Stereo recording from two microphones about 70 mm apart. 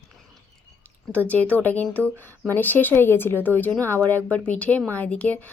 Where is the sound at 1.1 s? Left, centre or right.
Left.